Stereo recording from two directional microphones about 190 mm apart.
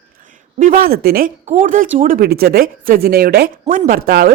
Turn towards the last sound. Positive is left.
turn(degrees=-50)  # may be behind; listen again after turning